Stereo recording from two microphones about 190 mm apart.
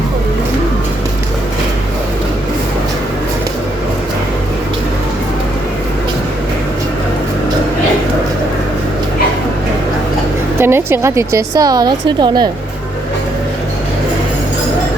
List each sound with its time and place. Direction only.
10.6 s a woman's voice: 10° right (ahead or behind)